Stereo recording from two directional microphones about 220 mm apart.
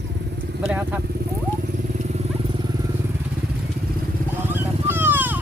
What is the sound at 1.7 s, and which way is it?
Motorcycle, 30° right (ahead or behind).